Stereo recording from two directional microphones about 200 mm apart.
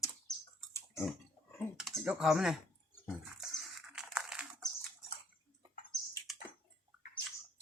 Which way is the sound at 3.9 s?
5° right (ahead or behind).